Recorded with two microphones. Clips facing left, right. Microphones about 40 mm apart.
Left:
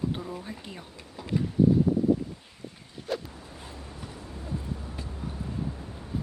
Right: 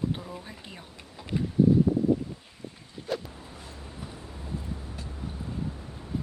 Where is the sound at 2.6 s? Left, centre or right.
Right.